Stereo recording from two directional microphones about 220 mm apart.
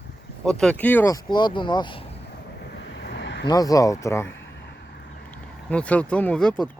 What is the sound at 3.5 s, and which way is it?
Speech, 15° left (ahead or behind).